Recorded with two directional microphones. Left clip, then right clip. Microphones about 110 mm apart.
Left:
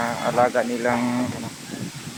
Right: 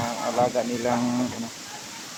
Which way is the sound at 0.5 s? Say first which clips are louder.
Left 3 dB; 5° right (ahead or behind).